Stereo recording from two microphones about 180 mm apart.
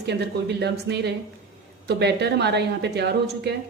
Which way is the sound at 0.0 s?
65° right (ahead or behind).